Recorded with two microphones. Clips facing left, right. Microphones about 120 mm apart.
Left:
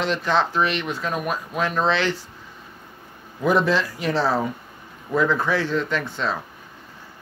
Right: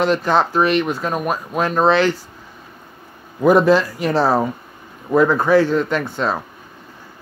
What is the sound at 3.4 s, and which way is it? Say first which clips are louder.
Speech: right 7 dB; 45° right (ahead or behind).